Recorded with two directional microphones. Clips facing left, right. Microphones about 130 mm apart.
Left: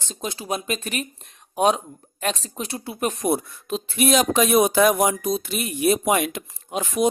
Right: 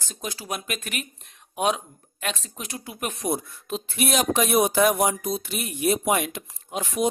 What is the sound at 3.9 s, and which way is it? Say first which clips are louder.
Speech: left 4 dB; 90° left.